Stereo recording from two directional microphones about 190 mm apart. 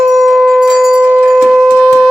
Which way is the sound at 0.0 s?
Centre (ahead or behind).